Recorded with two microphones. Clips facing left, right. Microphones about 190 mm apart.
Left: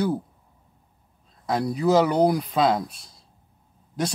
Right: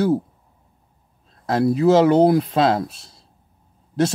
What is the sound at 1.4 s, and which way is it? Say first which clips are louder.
Speech: right 6 dB; 25° right (ahead or behind).